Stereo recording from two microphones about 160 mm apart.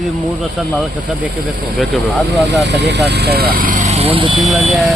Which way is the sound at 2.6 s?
90° right.